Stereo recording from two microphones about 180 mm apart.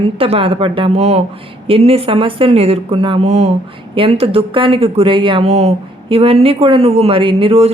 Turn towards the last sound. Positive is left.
turn(degrees=-30)  # may be behind; listen again after turning